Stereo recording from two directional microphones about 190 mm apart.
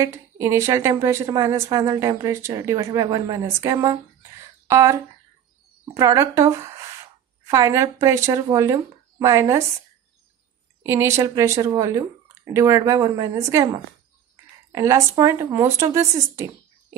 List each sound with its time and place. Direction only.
0.0 s a woman's voice: 15° right (ahead or behind)
10.9 s a woman's voice: 15° right (ahead or behind)